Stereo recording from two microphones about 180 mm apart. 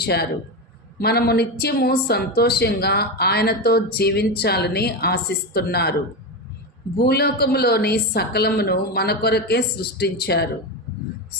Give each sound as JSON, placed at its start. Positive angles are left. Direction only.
{"t": 0.0, "sound": "a woman's voice", "side_deg": 65}
{"t": 7.0, "sound": "a woman's voice", "side_deg": 60}